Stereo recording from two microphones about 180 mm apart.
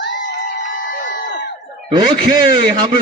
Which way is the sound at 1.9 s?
25° right (ahead or behind).